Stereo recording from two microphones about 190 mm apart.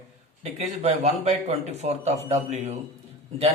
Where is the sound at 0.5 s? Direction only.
35° right (ahead or behind).